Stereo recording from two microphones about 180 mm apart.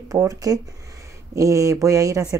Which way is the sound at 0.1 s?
20° right (ahead or behind).